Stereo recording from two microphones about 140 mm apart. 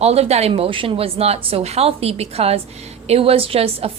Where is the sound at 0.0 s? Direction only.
45° right (ahead or behind).